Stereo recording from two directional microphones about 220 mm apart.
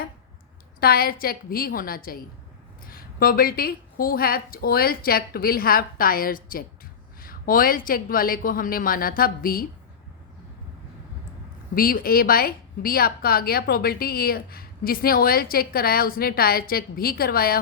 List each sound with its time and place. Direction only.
0.8 s a woman's voice: 45° left (ahead or behind)
11.7 s a woman's voice: 40° left (ahead or behind)